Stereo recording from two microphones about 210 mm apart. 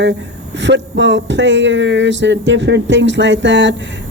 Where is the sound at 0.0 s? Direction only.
55° right (ahead or behind).